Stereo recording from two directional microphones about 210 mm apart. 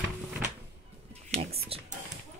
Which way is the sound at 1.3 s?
30° right (ahead or behind).